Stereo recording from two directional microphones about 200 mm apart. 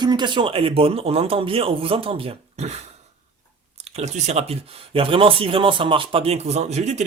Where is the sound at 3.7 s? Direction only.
30° right (ahead or behind).